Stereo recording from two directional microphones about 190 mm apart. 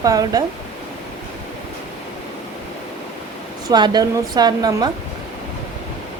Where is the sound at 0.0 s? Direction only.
20° right (ahead or behind).